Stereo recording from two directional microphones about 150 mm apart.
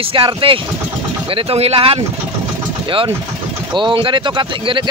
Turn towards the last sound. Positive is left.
turn(degrees=-35)  # may be behind; listen again after turning